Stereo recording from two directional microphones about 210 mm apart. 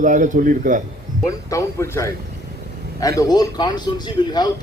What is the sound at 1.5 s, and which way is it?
Speech, 15° left (ahead or behind).